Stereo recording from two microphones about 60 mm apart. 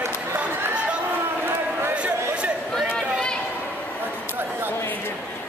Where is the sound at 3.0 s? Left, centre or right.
Centre.